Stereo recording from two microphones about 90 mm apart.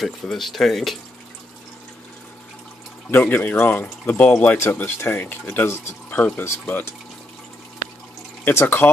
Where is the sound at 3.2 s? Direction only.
20° left (ahead or behind).